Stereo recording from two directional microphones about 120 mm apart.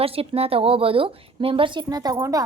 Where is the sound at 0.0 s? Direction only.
55° right (ahead or behind).